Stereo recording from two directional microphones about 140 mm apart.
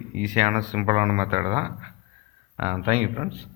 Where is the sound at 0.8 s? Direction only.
45° right (ahead or behind).